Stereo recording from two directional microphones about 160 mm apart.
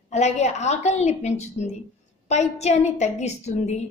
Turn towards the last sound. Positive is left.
turn(degrees=45)  # may be behind; listen again after turning